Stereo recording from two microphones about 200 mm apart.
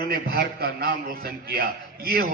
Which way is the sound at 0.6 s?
50° right (ahead or behind).